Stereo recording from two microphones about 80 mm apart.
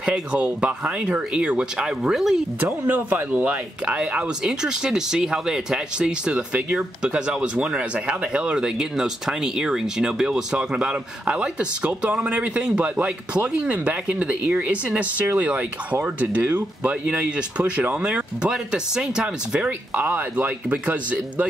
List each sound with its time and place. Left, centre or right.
0.0 s speech: centre
2.6 s speech: right